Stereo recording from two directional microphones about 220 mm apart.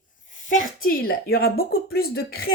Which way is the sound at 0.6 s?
40° left (ahead or behind).